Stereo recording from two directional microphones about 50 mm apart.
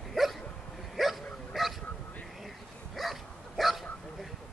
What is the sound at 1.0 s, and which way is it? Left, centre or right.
Dog, centre.